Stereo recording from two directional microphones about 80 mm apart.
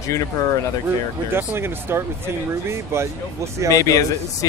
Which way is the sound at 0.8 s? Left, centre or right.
Right.